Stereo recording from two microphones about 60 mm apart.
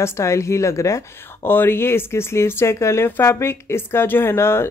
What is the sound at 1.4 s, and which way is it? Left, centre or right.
Speech, left.